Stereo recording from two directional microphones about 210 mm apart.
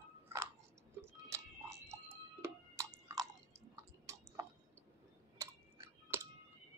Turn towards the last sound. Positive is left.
turn(degrees=-15)  # may be behind; listen again after turning